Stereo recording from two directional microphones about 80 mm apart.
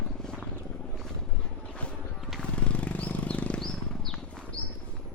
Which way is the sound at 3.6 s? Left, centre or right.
Centre.